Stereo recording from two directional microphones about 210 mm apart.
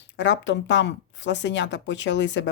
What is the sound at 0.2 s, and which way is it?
Speech, 60° left (ahead or behind).